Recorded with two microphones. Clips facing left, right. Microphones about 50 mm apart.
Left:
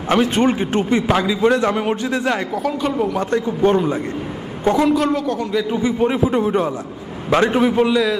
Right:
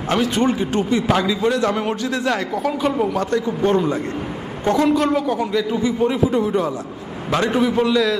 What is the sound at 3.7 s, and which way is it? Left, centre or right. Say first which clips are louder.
Speech: left 1 dB; centre.